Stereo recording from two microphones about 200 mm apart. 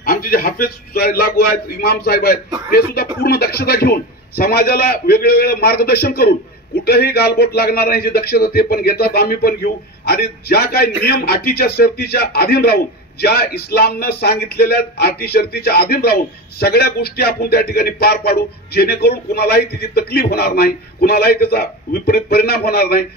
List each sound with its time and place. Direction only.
0.0 s a man's voice: 45° left (ahead or behind)